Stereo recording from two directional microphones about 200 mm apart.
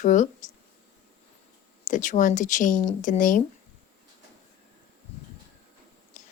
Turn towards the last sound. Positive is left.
turn(degrees=40)  # may be behind; listen again after turning